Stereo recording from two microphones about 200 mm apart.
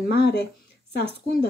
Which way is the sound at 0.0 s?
55° left (ahead or behind).